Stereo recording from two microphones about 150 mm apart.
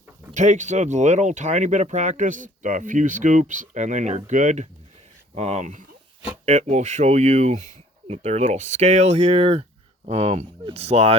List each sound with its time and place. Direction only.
0.3 s speech: 55° right (ahead or behind)